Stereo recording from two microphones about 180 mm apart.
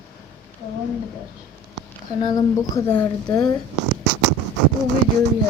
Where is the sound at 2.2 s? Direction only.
20° left (ahead or behind).